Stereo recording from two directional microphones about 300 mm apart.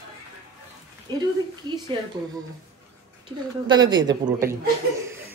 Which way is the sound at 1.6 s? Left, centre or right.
Centre.